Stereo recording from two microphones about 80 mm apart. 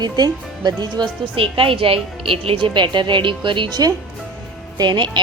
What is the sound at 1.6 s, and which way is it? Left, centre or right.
Speech, right.